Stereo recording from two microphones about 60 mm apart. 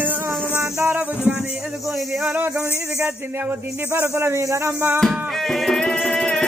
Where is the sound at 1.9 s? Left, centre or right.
Centre.